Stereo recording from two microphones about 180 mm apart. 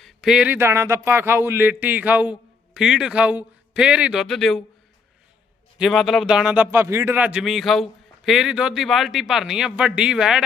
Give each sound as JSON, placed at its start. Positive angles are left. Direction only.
{"t": 0.0, "sound": "speech", "side_deg": -5}
{"t": 5.8, "sound": "speech", "side_deg": 0}